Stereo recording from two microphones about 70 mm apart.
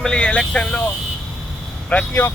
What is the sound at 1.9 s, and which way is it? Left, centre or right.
Speech, centre.